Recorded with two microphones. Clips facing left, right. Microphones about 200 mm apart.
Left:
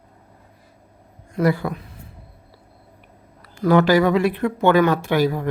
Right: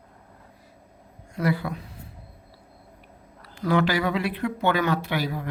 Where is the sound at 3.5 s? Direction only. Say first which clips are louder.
Left 7 dB; 45° left (ahead or behind).